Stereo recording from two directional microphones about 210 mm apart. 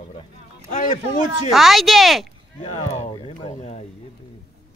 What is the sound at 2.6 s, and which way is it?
Speech, 30° left (ahead or behind).